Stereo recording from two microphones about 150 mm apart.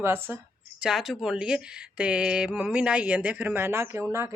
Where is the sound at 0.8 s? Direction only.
5° right (ahead or behind).